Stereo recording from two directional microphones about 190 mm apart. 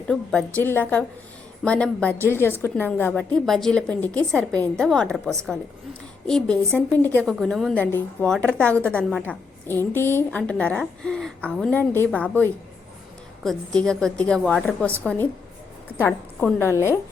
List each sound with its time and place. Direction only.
0.1 s a woman's voice: centre (ahead or behind)